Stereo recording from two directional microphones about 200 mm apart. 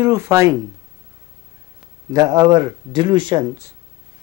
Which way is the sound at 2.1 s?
20° right (ahead or behind).